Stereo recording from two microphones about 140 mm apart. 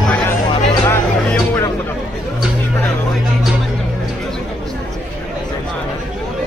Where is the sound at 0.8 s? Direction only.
15° left (ahead or behind).